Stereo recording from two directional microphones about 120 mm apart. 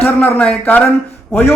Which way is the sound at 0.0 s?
15° left (ahead or behind).